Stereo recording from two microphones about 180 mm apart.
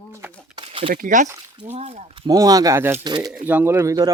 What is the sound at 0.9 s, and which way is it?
Speech, 50° right (ahead or behind).